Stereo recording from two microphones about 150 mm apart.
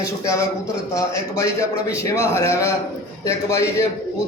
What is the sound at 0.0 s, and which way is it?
A man's voice, 20° left (ahead or behind).